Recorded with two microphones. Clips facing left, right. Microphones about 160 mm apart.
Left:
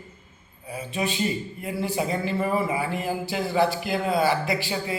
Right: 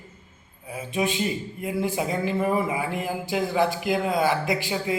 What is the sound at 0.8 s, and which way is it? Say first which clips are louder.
A man's voice: right 1 dB; 15° right (ahead or behind).